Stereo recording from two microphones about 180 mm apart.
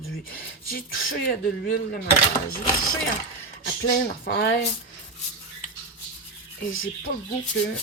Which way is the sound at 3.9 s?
55° left (ahead or behind).